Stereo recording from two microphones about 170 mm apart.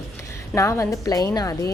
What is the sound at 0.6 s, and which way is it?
Speech, 20° left (ahead or behind).